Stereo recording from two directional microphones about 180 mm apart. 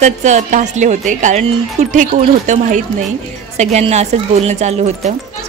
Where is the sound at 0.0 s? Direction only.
40° right (ahead or behind).